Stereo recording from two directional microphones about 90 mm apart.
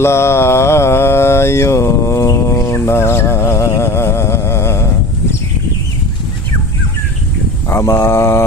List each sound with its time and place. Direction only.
0.0 s mantra: 30° left (ahead or behind)
7.7 s speech: 30° left (ahead or behind)